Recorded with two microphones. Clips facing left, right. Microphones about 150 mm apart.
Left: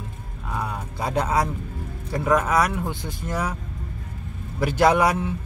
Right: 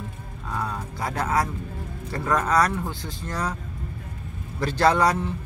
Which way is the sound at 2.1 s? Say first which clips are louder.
Left 2 dB; 10° left (ahead or behind).